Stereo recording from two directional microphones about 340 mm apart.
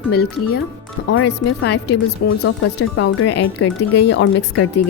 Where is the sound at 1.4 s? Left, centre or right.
Left.